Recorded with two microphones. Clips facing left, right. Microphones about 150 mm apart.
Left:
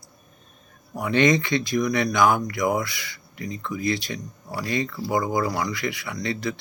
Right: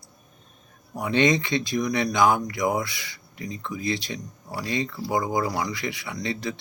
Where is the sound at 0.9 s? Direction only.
25° right (ahead or behind).